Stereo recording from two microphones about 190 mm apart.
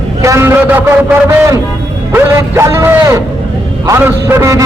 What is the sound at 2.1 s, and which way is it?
A man's voice, 15° right (ahead or behind).